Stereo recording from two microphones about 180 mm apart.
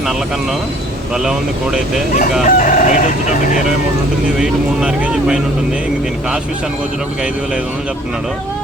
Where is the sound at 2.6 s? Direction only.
45° left (ahead or behind).